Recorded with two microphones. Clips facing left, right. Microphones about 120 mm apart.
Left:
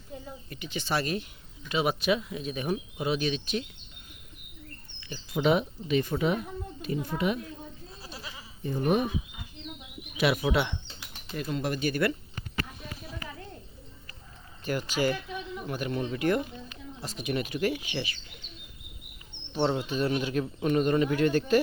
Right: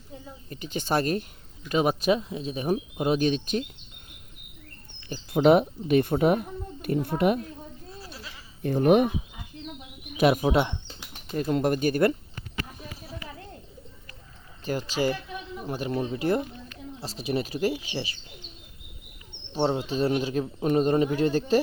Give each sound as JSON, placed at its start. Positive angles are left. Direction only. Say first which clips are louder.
{"t": 0.5, "sound": "speech", "louder": "right 4 dB", "side_deg": -40}
{"t": 4.9, "sound": "bird", "louder": "right 5 dB", "side_deg": -45}
{"t": 5.3, "sound": "a child's voice", "louder": "right 6 dB", "side_deg": -55}
{"t": 8.0, "sound": "goat", "louder": "even", "side_deg": 15}
{"t": 8.6, "sound": "speech", "louder": "right 7 dB", "side_deg": -85}
{"t": 10.2, "sound": "speech", "louder": "right 5 dB", "side_deg": -45}
{"t": 14.6, "sound": "speech", "louder": "right 1 dB", "side_deg": -35}
{"t": 19.5, "sound": "speech", "louder": "right 2 dB", "side_deg": -35}